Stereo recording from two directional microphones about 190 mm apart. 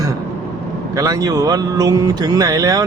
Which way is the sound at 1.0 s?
15° right (ahead or behind).